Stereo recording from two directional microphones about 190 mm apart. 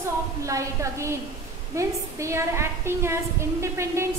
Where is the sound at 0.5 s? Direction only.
15° right (ahead or behind).